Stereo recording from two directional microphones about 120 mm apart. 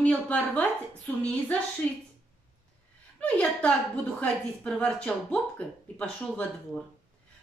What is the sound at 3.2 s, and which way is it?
A man's voice, 10° left (ahead or behind).